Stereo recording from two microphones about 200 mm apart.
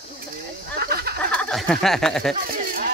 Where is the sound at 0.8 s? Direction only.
50° right (ahead or behind).